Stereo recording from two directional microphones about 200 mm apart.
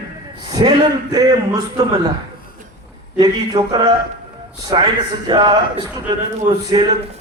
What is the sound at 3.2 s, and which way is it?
A man's voice, 25° right (ahead or behind).